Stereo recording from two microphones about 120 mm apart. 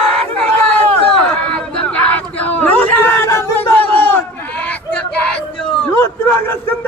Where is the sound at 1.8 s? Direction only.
10° left (ahead or behind).